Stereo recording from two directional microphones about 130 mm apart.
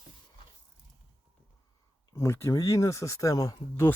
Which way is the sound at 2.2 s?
20° left (ahead or behind).